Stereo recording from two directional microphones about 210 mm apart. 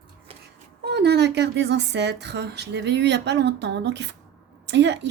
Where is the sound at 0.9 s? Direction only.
55° right (ahead or behind).